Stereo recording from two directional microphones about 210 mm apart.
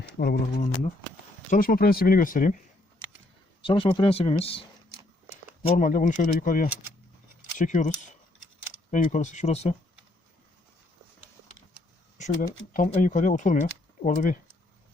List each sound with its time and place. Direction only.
0.2 s speech: 45° left (ahead or behind)
3.6 s speech: 25° left (ahead or behind)
5.6 s speech: 35° left (ahead or behind)
12.1 s a sound: 35° left (ahead or behind)
12.7 s speech: 40° left (ahead or behind)